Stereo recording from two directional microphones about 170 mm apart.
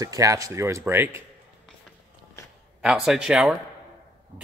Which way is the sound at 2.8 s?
Centre (ahead or behind).